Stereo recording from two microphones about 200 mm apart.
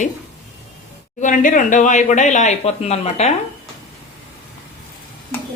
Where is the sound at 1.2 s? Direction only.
40° left (ahead or behind).